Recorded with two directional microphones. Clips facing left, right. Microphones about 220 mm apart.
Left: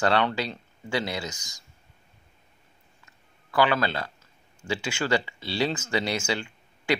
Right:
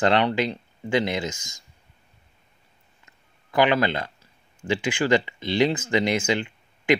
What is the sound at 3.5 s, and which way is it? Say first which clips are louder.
Speech: right 3 dB; 20° right (ahead or behind).